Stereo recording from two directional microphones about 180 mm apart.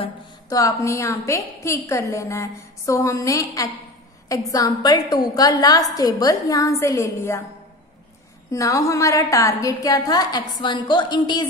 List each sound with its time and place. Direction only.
0.0 s a woman's voice: 20° left (ahead or behind)
8.5 s a woman's voice: 15° left (ahead or behind)